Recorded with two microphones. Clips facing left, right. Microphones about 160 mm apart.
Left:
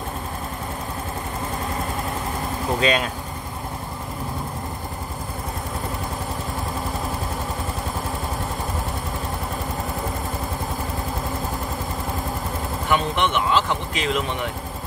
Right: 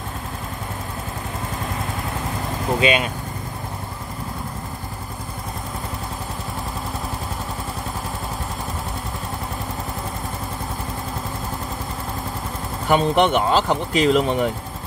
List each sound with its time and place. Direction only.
2.8 s speech: 5° right (ahead or behind)
12.8 s speech: 40° right (ahead or behind)